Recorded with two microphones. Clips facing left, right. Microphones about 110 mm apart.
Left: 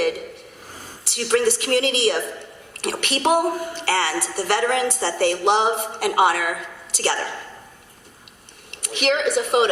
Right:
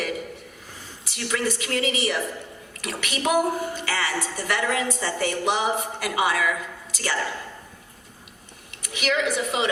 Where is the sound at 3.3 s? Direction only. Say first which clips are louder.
Left 3 dB; 70° left (ahead or behind).